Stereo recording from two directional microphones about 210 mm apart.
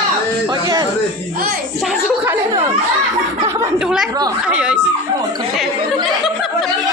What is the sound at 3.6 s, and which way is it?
Speech, 5° right (ahead or behind).